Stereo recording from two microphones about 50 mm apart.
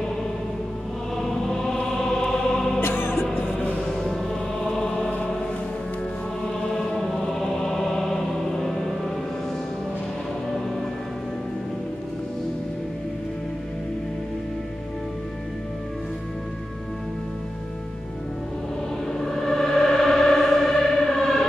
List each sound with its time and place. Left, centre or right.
1.1 s music: centre
2.8 s music: left
3.7 s music: centre
6.8 s chant: centre
7.4 s music: centre
19.2 s music: centre